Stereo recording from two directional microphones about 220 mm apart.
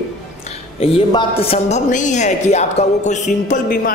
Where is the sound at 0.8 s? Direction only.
25° left (ahead or behind).